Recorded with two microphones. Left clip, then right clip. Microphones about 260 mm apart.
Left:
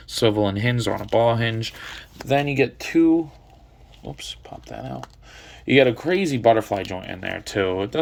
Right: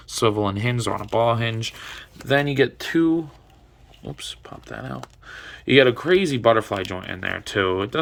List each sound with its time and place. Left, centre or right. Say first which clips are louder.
0.2 s speech: left 1 dB; centre
2.4 s speech: right 1 dB; right
4.7 s speech: even; centre